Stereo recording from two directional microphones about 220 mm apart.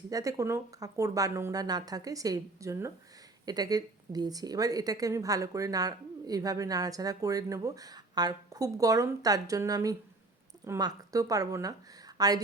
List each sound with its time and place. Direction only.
0.1 s a woman's voice: 15° right (ahead or behind)